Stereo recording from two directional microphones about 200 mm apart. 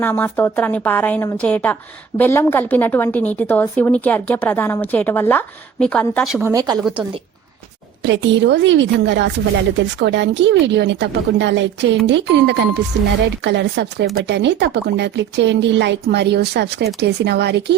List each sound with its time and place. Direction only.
0.0 s a woman's voice: 10° left (ahead or behind)
6.4 s speech: 15° right (ahead or behind)
8.0 s speech: 65° right (ahead or behind)